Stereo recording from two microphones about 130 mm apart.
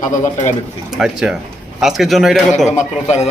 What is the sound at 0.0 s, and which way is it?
Speech, 80° left.